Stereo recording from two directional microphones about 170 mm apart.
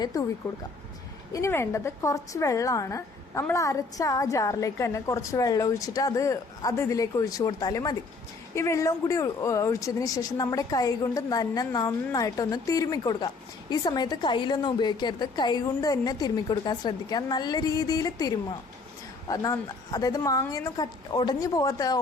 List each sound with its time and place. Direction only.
0.0 s speech: 20° left (ahead or behind)
1.3 s speech: 15° left (ahead or behind)